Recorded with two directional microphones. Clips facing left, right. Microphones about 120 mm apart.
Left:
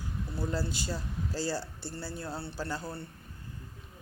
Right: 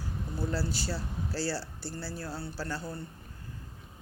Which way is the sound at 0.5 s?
15° left (ahead or behind).